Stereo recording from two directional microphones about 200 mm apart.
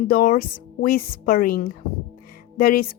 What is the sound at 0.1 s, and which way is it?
Speech, 45° left (ahead or behind).